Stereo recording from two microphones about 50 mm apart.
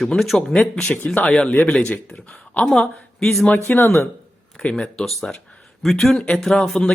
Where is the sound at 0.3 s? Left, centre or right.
Left.